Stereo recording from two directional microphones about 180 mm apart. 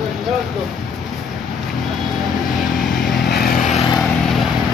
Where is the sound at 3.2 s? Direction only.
60° left (ahead or behind).